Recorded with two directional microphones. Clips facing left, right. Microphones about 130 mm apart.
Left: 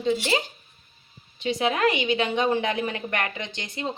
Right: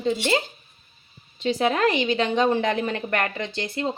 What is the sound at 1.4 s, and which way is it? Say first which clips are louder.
A woman's voice: right 2 dB; 35° right (ahead or behind).